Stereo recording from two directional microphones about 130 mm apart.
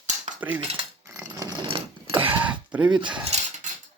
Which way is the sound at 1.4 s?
30° right (ahead or behind).